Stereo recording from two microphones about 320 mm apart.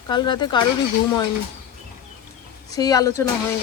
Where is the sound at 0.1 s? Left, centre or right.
Centre.